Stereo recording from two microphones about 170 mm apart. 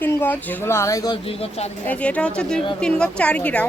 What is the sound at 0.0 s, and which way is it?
Speech, 10° left (ahead or behind).